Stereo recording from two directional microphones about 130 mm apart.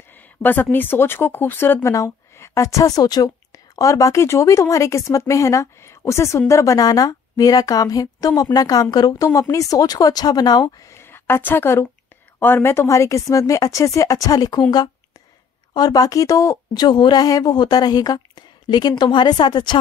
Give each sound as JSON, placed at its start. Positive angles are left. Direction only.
{"t": 0.1, "sound": "speech", "side_deg": 15}
{"t": 15.7, "sound": "speech", "side_deg": 30}